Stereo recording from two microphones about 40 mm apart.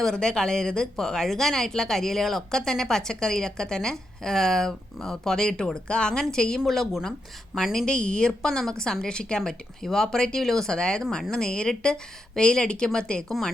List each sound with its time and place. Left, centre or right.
0.0 s speech: centre
7.9 s a woman's voice: left
10.4 s speech: centre
10.7 s a woman's voice: centre